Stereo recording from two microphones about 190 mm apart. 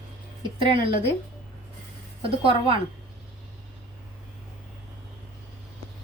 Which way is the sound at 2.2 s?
30° right (ahead or behind).